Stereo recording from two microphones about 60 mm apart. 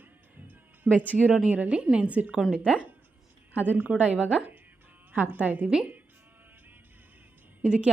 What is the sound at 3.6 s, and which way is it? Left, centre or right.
A woman's voice, right.